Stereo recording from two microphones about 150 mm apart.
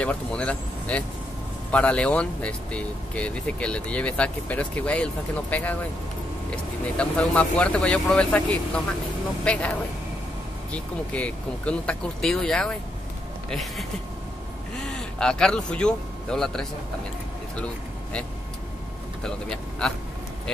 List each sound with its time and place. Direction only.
0.0 s speech: 10° left (ahead or behind)
14.9 s speech: 5° left (ahead or behind)
19.2 s speech: 5° left (ahead or behind)